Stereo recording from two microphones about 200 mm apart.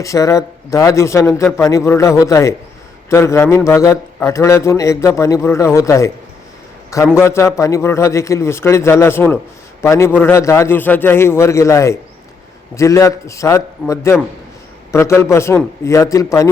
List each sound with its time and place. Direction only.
0.0 s a man's voice: 15° left (ahead or behind)
7.2 s a man's voice: 15° left (ahead or behind)